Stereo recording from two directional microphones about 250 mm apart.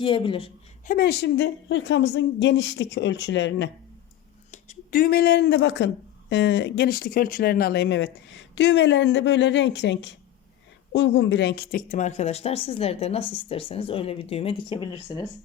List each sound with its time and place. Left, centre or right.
0.0 s speech: centre
0.9 s speech: left
4.5 s speech: left